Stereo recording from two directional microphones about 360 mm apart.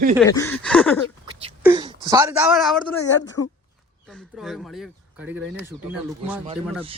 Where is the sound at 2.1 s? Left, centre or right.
Centre.